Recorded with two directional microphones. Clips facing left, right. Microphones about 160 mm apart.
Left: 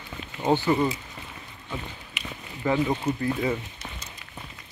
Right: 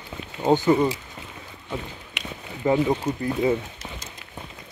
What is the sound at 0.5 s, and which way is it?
Speech, 20° right (ahead or behind).